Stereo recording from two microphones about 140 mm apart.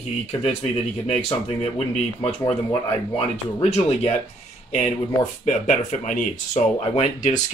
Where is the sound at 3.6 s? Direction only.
45° left (ahead or behind).